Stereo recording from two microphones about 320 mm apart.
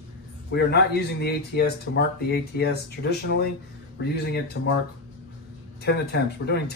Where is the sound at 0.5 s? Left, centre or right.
Left.